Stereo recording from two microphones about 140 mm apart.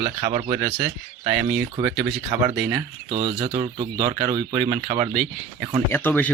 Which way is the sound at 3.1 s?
40° right (ahead or behind).